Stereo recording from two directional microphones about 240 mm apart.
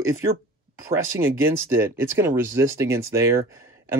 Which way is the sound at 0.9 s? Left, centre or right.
Centre.